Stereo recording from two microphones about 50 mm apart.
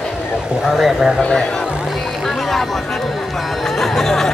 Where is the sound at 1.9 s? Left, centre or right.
Centre.